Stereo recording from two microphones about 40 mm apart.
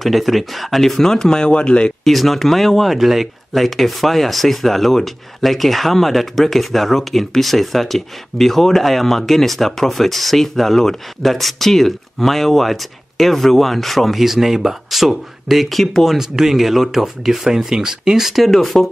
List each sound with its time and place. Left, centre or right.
0.0 s speech: centre; by 2.0 s left
2.0 s speech: centre
16.2 s speech: centre
18.5 s speech: centre